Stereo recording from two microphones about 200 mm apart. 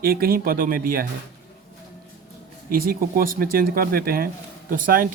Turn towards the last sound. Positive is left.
turn(degrees=-45)  # may be behind; listen again after turning